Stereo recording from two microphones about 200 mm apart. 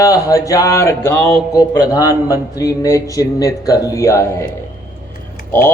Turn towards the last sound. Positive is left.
turn(degrees=10)  # may be behind; listen again after turning